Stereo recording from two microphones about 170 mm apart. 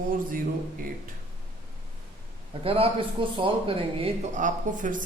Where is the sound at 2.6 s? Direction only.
35° right (ahead or behind); by 5.1 s 50° right (ahead or behind).